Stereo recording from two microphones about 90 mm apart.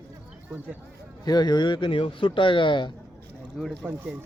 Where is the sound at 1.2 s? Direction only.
50° left (ahead or behind).